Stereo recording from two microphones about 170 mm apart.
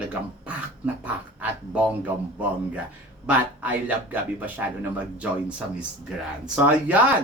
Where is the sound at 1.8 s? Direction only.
10° right (ahead or behind).